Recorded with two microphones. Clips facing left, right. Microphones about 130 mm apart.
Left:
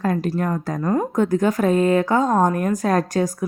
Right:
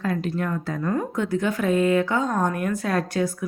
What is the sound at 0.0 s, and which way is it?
Speech, 40° left (ahead or behind).